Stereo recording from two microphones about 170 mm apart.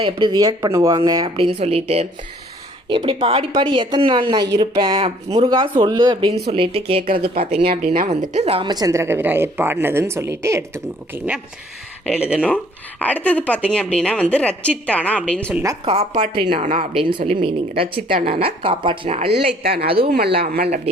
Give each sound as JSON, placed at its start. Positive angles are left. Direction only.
{"t": 0.0, "sound": "speech", "side_deg": -25}
{"t": 1.5, "sound": "a woman's voice", "side_deg": -35}
{"t": 12.0, "sound": "speech", "side_deg": 0}
{"t": 13.0, "sound": "a woman's voice", "side_deg": 10}
{"t": 15.5, "sound": "speech", "side_deg": -20}
{"t": 15.8, "sound": "speech", "side_deg": -40}
{"t": 16.3, "sound": "speech", "side_deg": -30}
{"t": 16.6, "sound": "speech", "side_deg": -45}
{"t": 16.9, "sound": "speech", "side_deg": -30}
{"t": 19.3, "sound": "speech", "side_deg": -70}